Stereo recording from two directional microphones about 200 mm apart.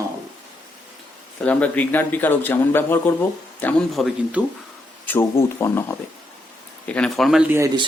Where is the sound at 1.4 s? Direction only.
5° left (ahead or behind).